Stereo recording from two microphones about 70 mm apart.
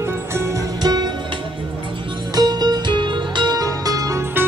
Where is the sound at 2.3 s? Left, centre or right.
Right.